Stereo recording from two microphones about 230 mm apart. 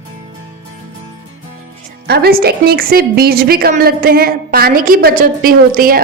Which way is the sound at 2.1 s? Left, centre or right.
Right.